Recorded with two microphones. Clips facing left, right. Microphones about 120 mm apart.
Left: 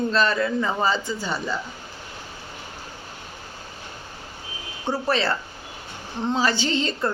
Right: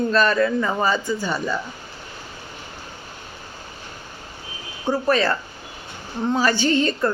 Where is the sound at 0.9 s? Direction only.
50° right (ahead or behind).